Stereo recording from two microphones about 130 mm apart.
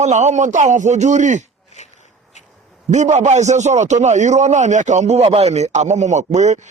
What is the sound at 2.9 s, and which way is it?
A man's voice, 65° right (ahead or behind).